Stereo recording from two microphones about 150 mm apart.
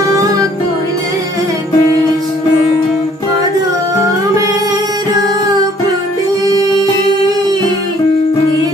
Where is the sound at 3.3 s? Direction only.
25° right (ahead or behind).